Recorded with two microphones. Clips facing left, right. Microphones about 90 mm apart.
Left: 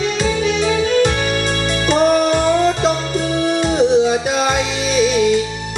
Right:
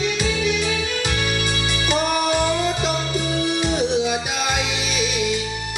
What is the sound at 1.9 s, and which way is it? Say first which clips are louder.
Music: left 7 dB; 40° left (ahead or behind).